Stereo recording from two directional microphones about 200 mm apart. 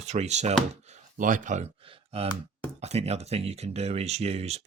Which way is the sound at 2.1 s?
30° right (ahead or behind).